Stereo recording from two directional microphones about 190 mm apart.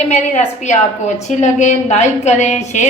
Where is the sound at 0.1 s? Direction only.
40° left (ahead or behind).